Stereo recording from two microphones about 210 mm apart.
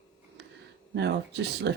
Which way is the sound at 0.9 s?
55° right (ahead or behind).